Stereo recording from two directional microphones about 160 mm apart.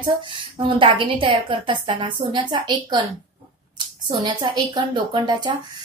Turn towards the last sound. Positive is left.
turn(degrees=-30)  # may be behind; listen again after turning